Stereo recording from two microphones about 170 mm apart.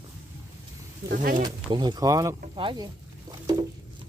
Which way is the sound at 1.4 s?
25° right (ahead or behind).